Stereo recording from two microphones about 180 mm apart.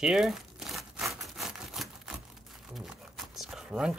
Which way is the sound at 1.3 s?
Centre (ahead or behind).